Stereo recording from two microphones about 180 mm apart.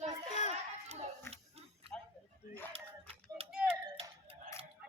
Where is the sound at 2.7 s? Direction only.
30° right (ahead or behind).